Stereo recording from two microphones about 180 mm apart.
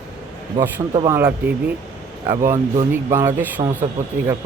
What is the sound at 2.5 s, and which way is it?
Speech, 15° right (ahead or behind).